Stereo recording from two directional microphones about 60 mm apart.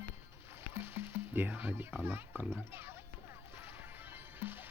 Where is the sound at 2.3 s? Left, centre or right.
Left.